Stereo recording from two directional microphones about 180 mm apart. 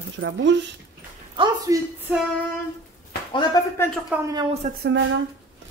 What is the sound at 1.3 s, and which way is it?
Speech, 25° right (ahead or behind).